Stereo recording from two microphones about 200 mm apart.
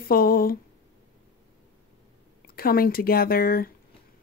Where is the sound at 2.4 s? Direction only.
50° left (ahead or behind).